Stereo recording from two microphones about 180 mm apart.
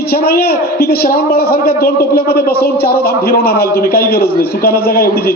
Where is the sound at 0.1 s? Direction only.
55° left (ahead or behind).